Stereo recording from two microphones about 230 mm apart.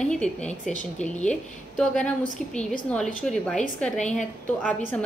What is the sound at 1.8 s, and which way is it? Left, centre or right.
A woman's voice, centre.